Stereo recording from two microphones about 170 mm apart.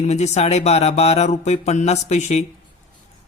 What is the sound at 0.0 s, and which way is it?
Speech, 40° left (ahead or behind).